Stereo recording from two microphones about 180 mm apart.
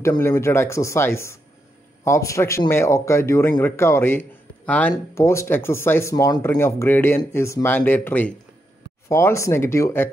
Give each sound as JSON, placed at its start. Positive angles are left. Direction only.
{"t": 0.0, "sound": "speech", "side_deg": 15}